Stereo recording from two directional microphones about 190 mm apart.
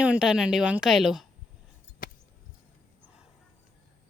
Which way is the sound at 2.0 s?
50° left (ahead or behind).